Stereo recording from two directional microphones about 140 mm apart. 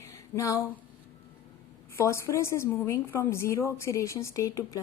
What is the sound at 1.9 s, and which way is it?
A woman's voice, 20° left (ahead or behind).